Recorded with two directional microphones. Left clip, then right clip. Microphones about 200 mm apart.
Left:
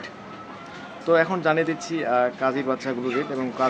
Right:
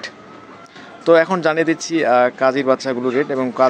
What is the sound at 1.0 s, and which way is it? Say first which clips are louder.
Speech: right 7 dB; 40° right (ahead or behind).